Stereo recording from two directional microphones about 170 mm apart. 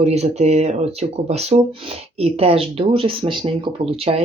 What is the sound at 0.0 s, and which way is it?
Speech, 40° right (ahead or behind).